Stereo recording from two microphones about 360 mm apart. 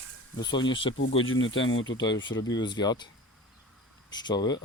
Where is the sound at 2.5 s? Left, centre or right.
Centre.